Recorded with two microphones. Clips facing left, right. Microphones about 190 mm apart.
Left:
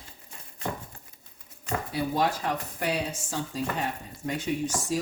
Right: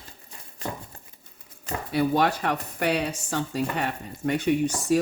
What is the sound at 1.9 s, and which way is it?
Speech, 65° right (ahead or behind).